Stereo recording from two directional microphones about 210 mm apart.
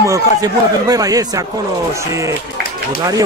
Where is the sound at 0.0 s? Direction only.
15° right (ahead or behind).